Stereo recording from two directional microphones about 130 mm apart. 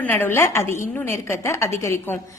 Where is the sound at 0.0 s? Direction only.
15° left (ahead or behind).